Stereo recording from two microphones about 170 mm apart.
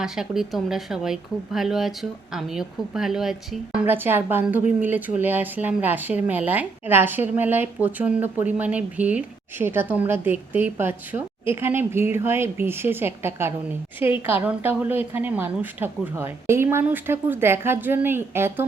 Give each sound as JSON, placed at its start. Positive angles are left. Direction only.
{"t": 0.0, "sound": "speech", "side_deg": 0}